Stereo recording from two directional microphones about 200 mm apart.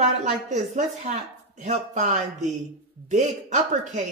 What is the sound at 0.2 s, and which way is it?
Speech, 35° right (ahead or behind).